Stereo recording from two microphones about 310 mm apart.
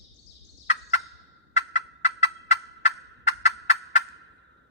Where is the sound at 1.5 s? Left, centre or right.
Left.